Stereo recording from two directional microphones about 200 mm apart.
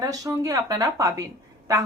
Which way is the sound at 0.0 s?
15° right (ahead or behind).